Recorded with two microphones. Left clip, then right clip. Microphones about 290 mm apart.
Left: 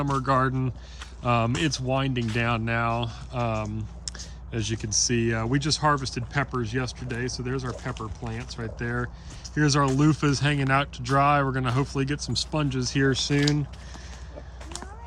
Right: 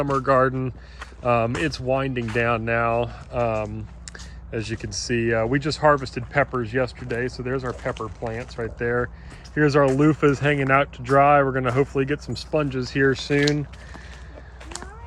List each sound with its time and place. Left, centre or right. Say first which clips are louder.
0.0 s speech: right 5 dB; centre
1.2 s speech: right 4 dB; left
5.2 s speech: right 5 dB; centre